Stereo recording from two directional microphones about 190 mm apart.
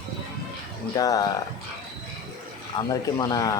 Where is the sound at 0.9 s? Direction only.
20° left (ahead or behind).